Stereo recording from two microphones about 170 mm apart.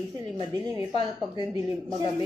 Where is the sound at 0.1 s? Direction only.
25° right (ahead or behind).